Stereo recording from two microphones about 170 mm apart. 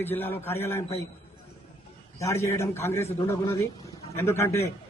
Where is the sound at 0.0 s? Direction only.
10° left (ahead or behind).